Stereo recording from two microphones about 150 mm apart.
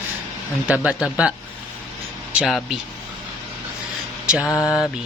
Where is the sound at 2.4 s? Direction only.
Centre (ahead or behind).